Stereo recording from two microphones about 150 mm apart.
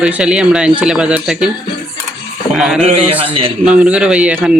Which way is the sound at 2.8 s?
45° right (ahead or behind).